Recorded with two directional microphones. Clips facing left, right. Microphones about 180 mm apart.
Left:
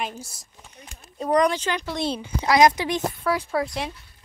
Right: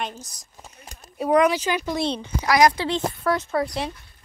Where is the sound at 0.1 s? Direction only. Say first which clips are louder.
Left 2 dB; 10° left (ahead or behind).